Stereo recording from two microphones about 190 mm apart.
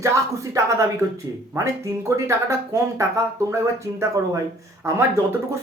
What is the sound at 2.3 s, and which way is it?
Speech, 15° right (ahead or behind).